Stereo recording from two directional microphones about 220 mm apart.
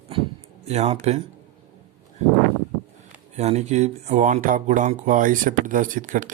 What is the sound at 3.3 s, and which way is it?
Speech, 30° right (ahead or behind).